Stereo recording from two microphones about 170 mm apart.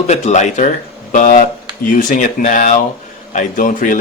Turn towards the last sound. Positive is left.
turn(degrees=50)  # may be behind; listen again after turning